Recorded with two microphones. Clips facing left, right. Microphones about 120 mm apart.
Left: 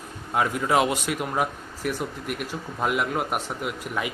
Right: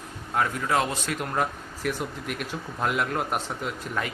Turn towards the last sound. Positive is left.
turn(degrees=10)  # may be behind; listen again after turning